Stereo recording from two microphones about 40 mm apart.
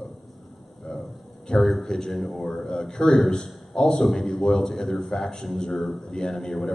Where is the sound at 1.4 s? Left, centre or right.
Centre.